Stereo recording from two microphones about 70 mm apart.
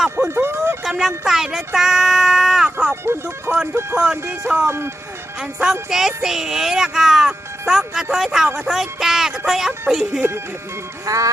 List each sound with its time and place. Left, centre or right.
0.2 s a sound: right
0.9 s speech: centre
2.9 s speech: right
5.9 s speech: centre
11.0 s music: right